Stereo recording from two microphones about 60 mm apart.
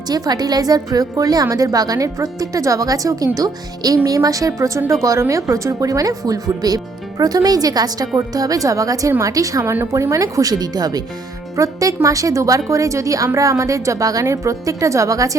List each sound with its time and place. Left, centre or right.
0.1 s a woman's voice: right
3.3 s a woman's voice: right
11.5 s a woman's voice: right